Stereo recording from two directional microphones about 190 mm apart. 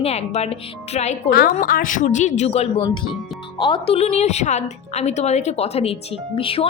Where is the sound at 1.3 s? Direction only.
55° left (ahead or behind).